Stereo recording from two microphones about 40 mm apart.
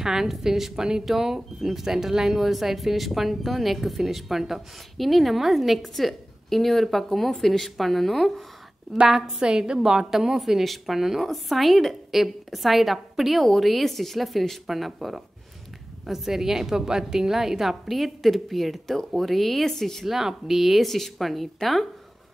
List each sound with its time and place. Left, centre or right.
0.0 s a woman's voice: centre
9.0 s a woman's voice: centre
9.4 s a woman's voice: centre
20.1 s speech: centre